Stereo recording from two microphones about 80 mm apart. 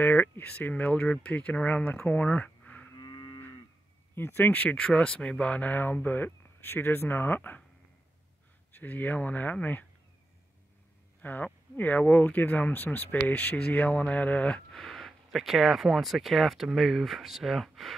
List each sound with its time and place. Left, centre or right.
0.0 s speech: left
3.0 s livestock: left
4.1 s speech: left
8.7 s speech: left
11.2 s speech: left; by 17.9 s centre